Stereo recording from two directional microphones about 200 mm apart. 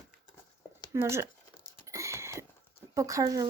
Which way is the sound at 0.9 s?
15° right (ahead or behind).